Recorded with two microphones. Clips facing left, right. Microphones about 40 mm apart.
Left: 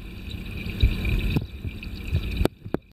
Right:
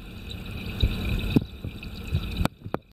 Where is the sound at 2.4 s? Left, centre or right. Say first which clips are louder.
Left 5 dB; centre.